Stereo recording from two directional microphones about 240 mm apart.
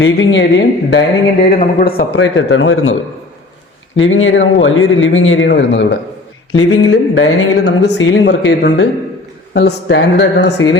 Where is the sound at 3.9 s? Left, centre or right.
Left.